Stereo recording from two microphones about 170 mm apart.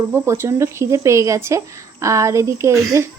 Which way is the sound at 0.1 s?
15° right (ahead or behind).